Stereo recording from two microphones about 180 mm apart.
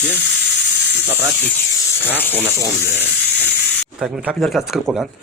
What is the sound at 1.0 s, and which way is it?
Snake, 10° right (ahead or behind).